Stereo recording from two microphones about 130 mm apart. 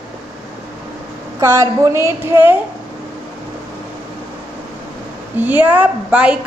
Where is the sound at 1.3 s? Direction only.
25° right (ahead or behind).